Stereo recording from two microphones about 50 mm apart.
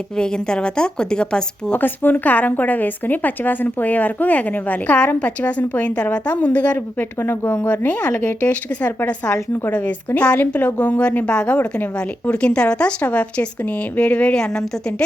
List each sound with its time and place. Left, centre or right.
0.2 s a woman's voice: centre
1.8 s a woman's voice: left
6.7 s speech: left
7.5 s a woman's voice: left
10.2 s a woman's voice: left
14.3 s a woman's voice: centre